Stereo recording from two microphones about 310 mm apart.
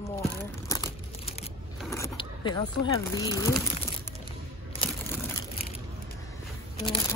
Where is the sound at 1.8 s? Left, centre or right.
Centre.